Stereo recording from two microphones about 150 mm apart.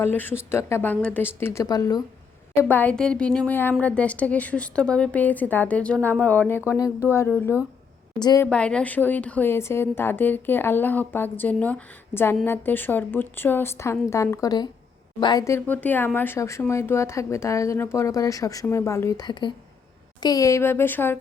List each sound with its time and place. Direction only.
0.0 s a woman's voice: 15° left (ahead or behind)
2.6 s a woman's voice: 10° left (ahead or behind)
6.7 s speech: 25° left (ahead or behind)
7.1 s a woman's voice: 15° left (ahead or behind)
8.2 s speech: 25° left (ahead or behind)
8.4 s a woman's voice: 5° left (ahead or behind)